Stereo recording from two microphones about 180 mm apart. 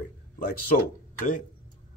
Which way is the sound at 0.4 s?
50° left (ahead or behind).